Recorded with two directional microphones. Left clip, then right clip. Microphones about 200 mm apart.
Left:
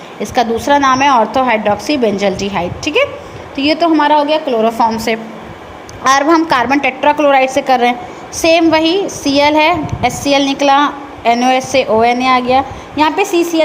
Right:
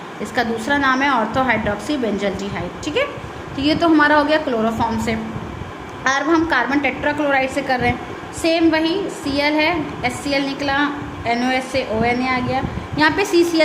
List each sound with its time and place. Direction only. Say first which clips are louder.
0.3 s a woman's voice: left 8 dB; 25° left (ahead or behind)
4.1 s a woman's voice: left 4 dB; 20° right (ahead or behind)
4.4 s a woman's voice: left 8 dB; 20° left (ahead or behind)